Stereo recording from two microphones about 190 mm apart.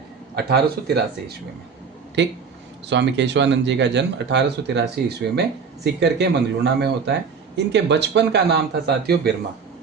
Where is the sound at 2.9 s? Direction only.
70° right (ahead or behind).